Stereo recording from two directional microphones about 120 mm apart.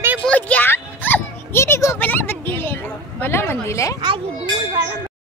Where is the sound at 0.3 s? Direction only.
10° left (ahead or behind).